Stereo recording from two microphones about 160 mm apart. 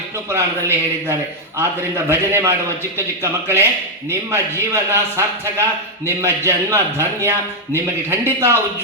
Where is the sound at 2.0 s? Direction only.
15° right (ahead or behind).